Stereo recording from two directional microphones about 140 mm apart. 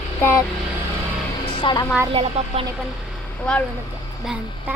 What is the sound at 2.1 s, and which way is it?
Speech, 45° right (ahead or behind).